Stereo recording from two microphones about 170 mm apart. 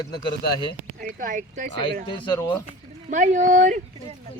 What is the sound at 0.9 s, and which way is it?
Speech, 50° right (ahead or behind).